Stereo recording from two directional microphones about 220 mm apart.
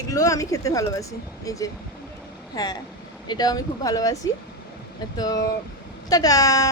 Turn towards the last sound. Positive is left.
turn(degrees=15)  # may be behind; listen again after turning